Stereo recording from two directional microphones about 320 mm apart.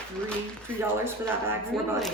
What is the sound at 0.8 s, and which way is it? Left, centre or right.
Speech, centre.